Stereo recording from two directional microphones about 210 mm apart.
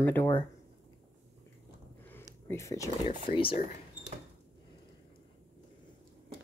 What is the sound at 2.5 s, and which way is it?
Speech, 15° left (ahead or behind).